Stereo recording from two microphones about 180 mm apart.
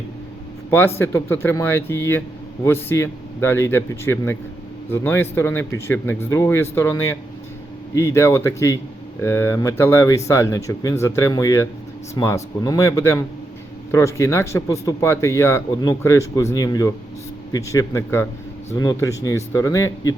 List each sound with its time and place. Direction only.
0.7 s speech: 15° left (ahead or behind)